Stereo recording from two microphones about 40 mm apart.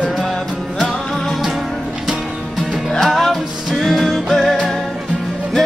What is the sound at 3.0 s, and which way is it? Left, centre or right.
Music, centre.